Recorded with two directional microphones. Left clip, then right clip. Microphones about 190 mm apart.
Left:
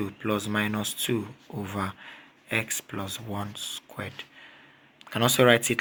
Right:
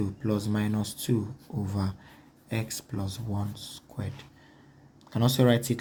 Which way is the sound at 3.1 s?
30° left (ahead or behind).